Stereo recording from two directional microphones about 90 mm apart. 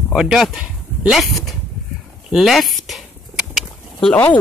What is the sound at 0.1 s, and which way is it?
Speech, 5° right (ahead or behind).